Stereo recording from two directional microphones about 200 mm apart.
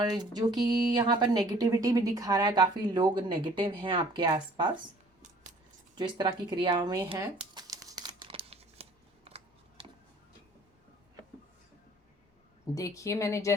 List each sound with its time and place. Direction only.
0.0 s speech: 20° right (ahead or behind)
6.0 s a sound: 25° right (ahead or behind)
12.7 s speech: 15° left (ahead or behind)